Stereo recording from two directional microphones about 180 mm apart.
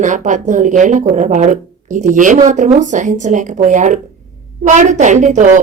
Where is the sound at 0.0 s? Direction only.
45° right (ahead or behind).